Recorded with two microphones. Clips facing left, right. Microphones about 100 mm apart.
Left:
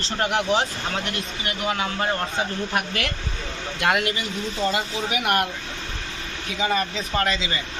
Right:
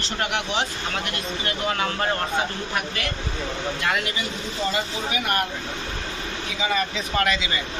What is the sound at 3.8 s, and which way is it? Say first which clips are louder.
Speech: left 6 dB; 55° left (ahead or behind).